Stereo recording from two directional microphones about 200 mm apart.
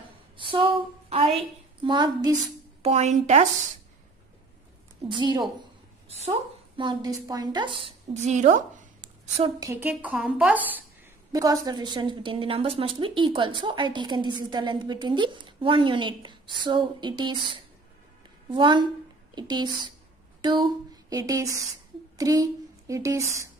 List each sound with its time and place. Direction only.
0.4 s a woman's voice: 25° right (ahead or behind)
2.3 s speech: 35° right (ahead or behind)
5.0 s a woman's voice: 20° right (ahead or behind)
6.0 s speech: 30° right (ahead or behind)
6.8 s a woman's voice: 20° right (ahead or behind); by 8.6 s 35° right (ahead or behind)
9.6 s a woman's voice: 10° right (ahead or behind)
11.3 s a woman's voice: 20° right (ahead or behind)
18.5 s a woman's voice: 25° right (ahead or behind)